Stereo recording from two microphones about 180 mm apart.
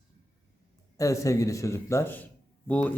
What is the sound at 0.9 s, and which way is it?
Speech, 15° left (ahead or behind).